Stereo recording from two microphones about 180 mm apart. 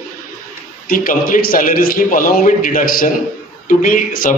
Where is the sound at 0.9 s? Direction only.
50° left (ahead or behind).